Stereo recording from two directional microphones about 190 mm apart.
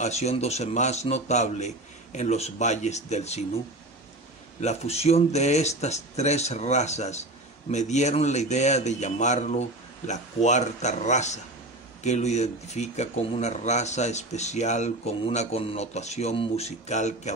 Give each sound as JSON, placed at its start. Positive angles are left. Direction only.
{"t": 0.0, "sound": "speech", "side_deg": 35}
{"t": 4.6, "sound": "speech", "side_deg": 35}